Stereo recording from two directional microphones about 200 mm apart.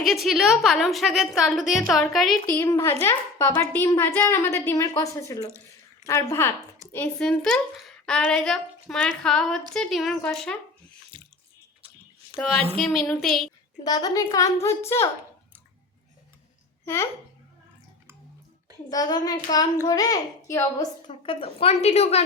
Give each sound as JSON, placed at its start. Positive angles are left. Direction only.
{"t": 0.0, "sound": "a woman's voice", "side_deg": 0}
{"t": 5.5, "sound": "a sound", "side_deg": -15}
{"t": 6.1, "sound": "a woman's voice", "side_deg": 15}
{"t": 11.1, "sound": "drip", "side_deg": -25}
{"t": 12.4, "sound": "a woman's voice", "side_deg": 0}
{"t": 13.8, "sound": "a woman's voice", "side_deg": 20}
{"t": 16.8, "sound": "a child's voice", "side_deg": 10}
{"t": 18.9, "sound": "a child's voice", "side_deg": 20}
{"t": 21.2, "sound": "a woman's voice", "side_deg": 30}